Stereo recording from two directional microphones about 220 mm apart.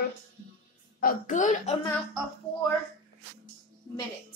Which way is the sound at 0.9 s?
40° left (ahead or behind).